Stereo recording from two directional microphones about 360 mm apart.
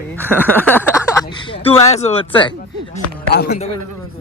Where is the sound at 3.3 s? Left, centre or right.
Left.